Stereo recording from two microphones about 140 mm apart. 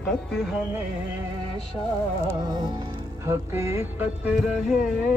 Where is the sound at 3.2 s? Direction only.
20° right (ahead or behind).